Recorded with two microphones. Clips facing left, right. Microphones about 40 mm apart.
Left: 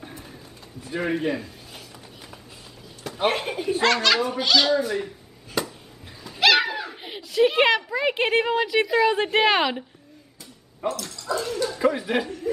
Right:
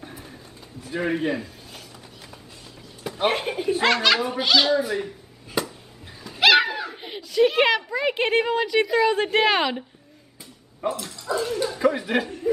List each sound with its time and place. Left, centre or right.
0.0 s pigeon: centre
0.8 s a man's voice: centre
3.0 s a child's voice: centre
10.9 s speech: centre
11.2 s dog: centre
11.8 s speech: centre